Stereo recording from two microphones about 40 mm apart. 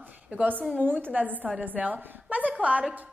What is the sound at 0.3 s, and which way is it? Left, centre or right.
A woman's voice, right.